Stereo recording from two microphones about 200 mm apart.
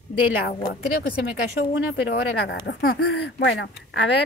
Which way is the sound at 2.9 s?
90° left.